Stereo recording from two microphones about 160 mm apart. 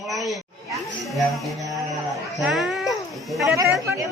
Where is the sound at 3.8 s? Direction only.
20° right (ahead or behind).